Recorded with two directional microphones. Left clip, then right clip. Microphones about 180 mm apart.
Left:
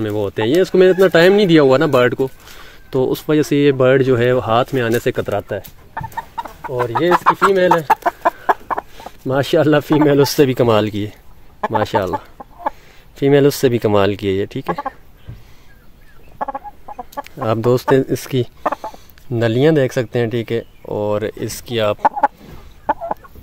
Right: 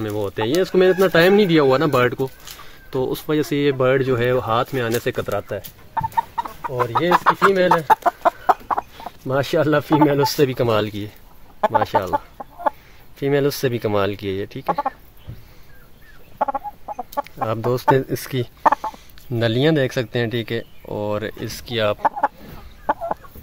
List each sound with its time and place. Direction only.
0.0 s speech: 50° left (ahead or behind)
5.6 s chicken: 40° left (ahead or behind)
7.1 s speech: 30° left (ahead or behind)
7.6 s chicken: 40° left (ahead or behind)
9.3 s speech: 55° left (ahead or behind)
12.4 s chicken: 10° left (ahead or behind)
13.2 s speech: 50° left (ahead or behind)
16.3 s chicken: centre (ahead or behind)
17.2 s speech: 55° left (ahead or behind); by 18.5 s 35° left (ahead or behind)
18.6 s chicken: 5° right (ahead or behind)
19.3 s speech: 30° left (ahead or behind)
22.9 s chicken: 20° left (ahead or behind)